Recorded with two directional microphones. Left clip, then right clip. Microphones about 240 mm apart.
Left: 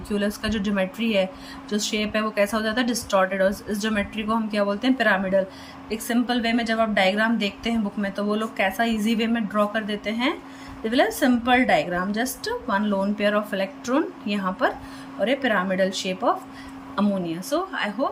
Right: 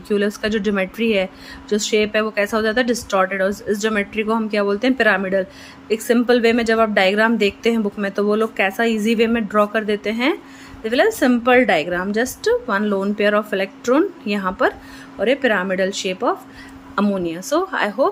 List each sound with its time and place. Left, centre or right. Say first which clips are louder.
0.1 s speech: right 7 dB; centre